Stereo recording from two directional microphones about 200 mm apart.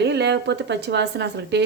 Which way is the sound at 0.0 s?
60° right (ahead or behind).